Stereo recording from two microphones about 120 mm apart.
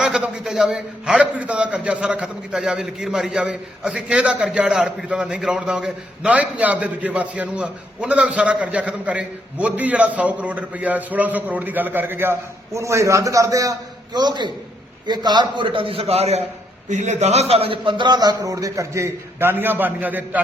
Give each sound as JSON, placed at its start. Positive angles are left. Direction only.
{"t": 0.0, "sound": "a man's voice", "side_deg": -10}
{"t": 16.9, "sound": "a man's voice", "side_deg": -80}